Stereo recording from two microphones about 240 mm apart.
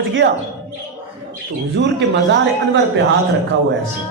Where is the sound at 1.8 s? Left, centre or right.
Right.